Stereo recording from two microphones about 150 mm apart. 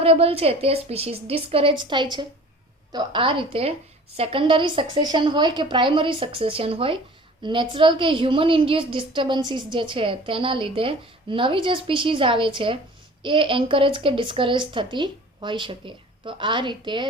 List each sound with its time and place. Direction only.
0.0 s a woman's voice: 40° right (ahead or behind)